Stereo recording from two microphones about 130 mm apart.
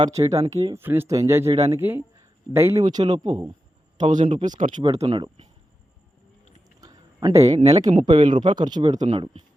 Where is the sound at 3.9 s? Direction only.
70° right (ahead or behind).